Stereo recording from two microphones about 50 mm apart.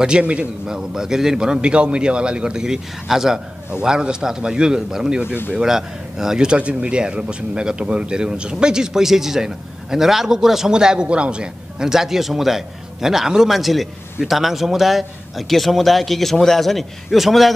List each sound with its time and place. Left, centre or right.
0.0 s speech: right; by 17.5 s centre